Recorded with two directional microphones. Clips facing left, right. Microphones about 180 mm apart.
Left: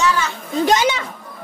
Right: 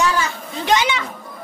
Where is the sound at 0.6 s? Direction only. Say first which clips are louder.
Left 1 dB; 40° left (ahead or behind).